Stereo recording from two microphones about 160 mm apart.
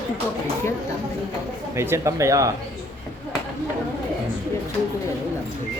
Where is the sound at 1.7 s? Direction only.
15° right (ahead or behind).